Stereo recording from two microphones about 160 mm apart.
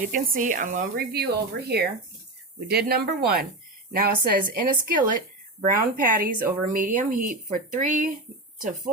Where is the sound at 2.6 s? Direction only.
80° right.